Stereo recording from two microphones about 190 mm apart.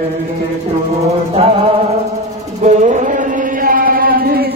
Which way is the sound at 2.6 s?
40° right (ahead or behind).